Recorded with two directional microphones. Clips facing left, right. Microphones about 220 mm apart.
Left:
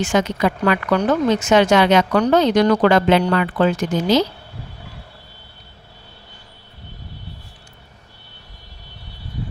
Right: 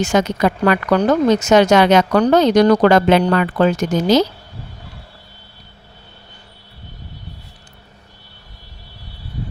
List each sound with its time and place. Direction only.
0.0 s speech: 40° right (ahead or behind)